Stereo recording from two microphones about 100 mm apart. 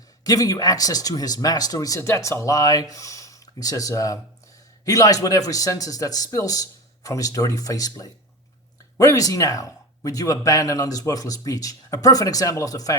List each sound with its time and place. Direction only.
0.3 s speech: 35° left (ahead or behind)